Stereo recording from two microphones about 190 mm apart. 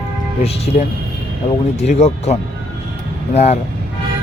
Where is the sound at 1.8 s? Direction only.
35° left (ahead or behind).